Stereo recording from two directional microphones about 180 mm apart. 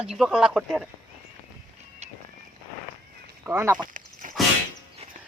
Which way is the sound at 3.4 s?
10° right (ahead or behind).